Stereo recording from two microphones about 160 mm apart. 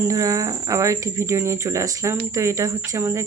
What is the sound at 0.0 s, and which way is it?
Speech, 20° right (ahead or behind).